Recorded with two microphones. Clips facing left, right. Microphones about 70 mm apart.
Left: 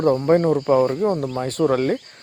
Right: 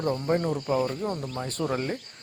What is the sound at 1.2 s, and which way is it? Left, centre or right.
Speech, left.